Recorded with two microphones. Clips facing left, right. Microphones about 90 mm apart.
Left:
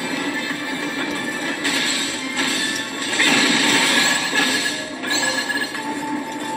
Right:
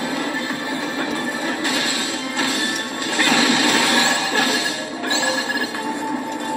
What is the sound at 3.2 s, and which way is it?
Music, 25° right (ahead or behind).